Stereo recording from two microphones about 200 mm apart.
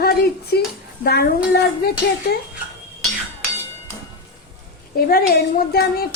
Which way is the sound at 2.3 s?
50° left (ahead or behind).